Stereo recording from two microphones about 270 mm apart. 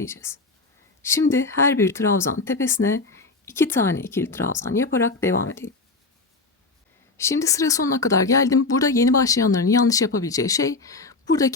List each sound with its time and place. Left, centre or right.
0.0 s speech: centre
7.2 s speech: centre